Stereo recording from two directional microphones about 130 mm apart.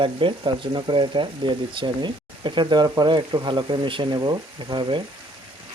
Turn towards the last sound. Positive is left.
turn(degrees=-35)  # may be behind; listen again after turning